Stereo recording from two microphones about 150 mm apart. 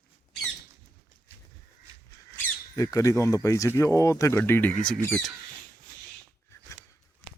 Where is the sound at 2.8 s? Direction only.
20° left (ahead or behind).